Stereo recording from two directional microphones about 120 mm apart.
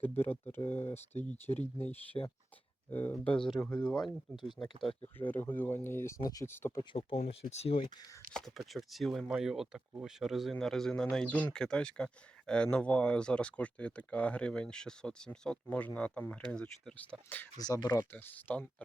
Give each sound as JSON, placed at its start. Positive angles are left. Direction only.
{"t": 0.2, "sound": "speech", "side_deg": 20}
{"t": 0.6, "sound": "speech", "side_deg": 60}
{"t": 1.2, "sound": "speech", "side_deg": 15}
{"t": 2.2, "sound": "speech", "side_deg": 35}
{"t": 2.9, "sound": "speech", "side_deg": 15}
{"t": 5.1, "sound": "speech", "side_deg": 15}
{"t": 6.9, "sound": "speech", "side_deg": 55}
{"t": 8.3, "sound": "speech", "side_deg": 5}
{"t": 17.6, "sound": "speech", "side_deg": 35}
{"t": 18.1, "sound": "speech", "side_deg": 15}